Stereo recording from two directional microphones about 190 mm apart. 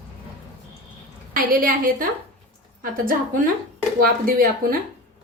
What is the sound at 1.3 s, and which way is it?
A woman's voice, 50° right (ahead or behind).